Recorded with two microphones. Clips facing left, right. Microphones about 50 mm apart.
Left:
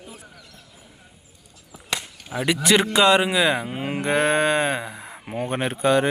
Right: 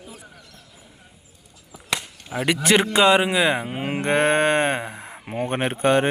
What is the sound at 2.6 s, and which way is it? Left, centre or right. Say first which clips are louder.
A man's voice: even; right.